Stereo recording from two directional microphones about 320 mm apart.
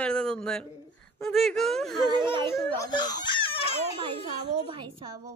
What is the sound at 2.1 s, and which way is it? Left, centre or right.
Speech, centre.